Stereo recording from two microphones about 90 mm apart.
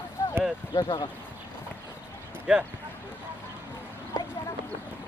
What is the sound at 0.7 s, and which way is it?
Speech, 55° left (ahead or behind).